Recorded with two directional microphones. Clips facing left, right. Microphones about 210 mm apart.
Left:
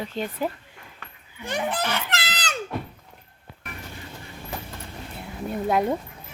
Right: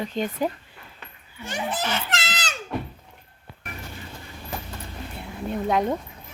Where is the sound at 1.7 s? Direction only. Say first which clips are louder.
Even; 60° left (ahead or behind).